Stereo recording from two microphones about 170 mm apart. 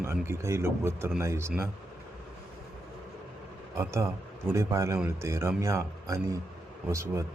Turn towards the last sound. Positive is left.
turn(degrees=-15)  # may be behind; listen again after turning